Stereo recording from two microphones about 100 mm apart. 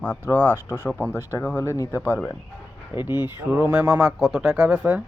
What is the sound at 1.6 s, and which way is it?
Speech, 30° left (ahead or behind).